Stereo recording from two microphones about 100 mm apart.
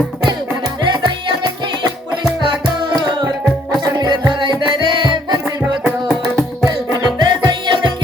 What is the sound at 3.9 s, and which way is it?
Music, 45° right (ahead or behind).